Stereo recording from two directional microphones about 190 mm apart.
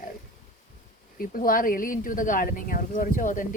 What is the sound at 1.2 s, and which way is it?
Speech, 50° left (ahead or behind).